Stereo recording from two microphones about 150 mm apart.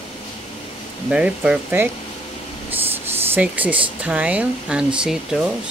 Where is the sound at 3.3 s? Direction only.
10° right (ahead or behind).